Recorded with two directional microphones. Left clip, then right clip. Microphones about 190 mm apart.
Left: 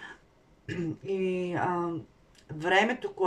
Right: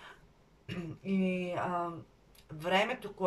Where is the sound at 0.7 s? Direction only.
35° left (ahead or behind).